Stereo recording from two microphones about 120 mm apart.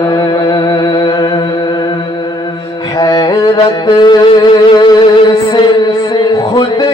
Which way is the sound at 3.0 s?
35° left (ahead or behind).